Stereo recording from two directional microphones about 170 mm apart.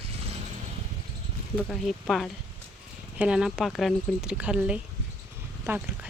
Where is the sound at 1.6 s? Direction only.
5° left (ahead or behind).